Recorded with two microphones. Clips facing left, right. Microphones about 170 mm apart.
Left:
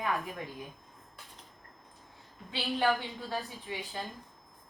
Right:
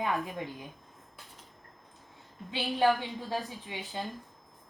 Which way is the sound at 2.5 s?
15° right (ahead or behind).